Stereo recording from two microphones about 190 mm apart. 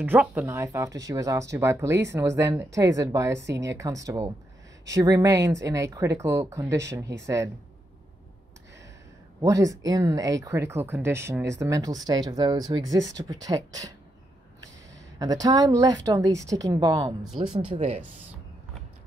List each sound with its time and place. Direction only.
0.0 s speech: 10° right (ahead or behind)
9.4 s speech: 20° right (ahead or behind)
15.1 s speech: 20° right (ahead or behind)
17.7 s speech: 35° right (ahead or behind)